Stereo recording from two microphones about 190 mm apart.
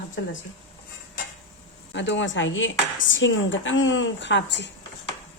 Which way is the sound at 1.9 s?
70° left (ahead or behind).